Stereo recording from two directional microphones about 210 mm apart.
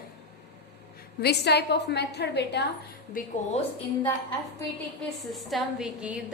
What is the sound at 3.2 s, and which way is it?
Speech, 40° left (ahead or behind).